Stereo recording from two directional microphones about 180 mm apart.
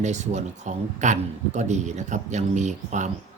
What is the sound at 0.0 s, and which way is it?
Speech, 40° right (ahead or behind).